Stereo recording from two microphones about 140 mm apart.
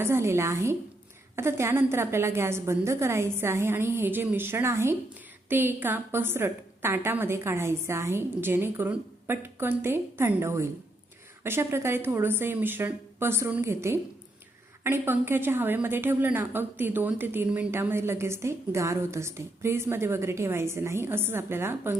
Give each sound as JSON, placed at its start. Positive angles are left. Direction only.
{"t": 0.0, "sound": "a woman's voice", "side_deg": -20}